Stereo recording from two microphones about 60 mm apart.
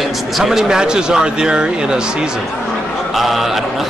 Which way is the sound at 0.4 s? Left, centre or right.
Centre.